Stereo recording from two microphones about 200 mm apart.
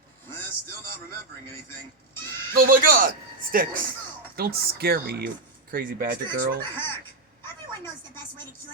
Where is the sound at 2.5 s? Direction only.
45° right (ahead or behind).